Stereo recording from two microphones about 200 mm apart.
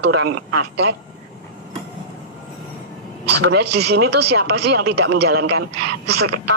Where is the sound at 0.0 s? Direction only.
55° right (ahead or behind).